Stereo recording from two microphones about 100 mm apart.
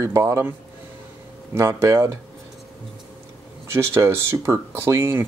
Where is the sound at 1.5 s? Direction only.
30° right (ahead or behind).